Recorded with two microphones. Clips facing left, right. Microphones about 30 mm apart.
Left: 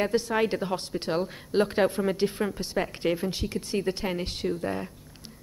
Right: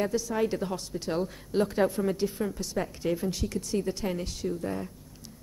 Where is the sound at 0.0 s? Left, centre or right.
Left.